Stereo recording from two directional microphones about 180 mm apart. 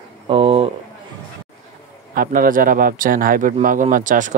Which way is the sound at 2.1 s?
50° right (ahead or behind).